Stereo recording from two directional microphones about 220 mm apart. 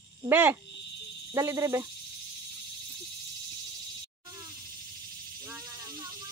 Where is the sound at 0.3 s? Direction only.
10° right (ahead or behind).